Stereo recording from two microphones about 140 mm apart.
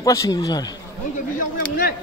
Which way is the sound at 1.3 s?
80° left.